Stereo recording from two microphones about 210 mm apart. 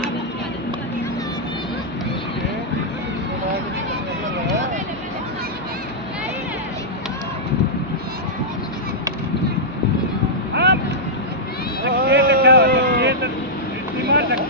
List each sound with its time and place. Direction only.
10.5 s vehicle: 55° right (ahead or behind)
12.0 s vehicle: 50° right (ahead or behind)